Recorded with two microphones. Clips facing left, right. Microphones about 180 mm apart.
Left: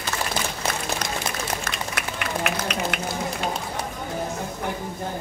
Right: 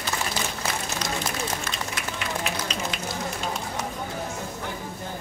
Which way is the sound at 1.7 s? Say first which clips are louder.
Left 2 dB; 65° left (ahead or behind).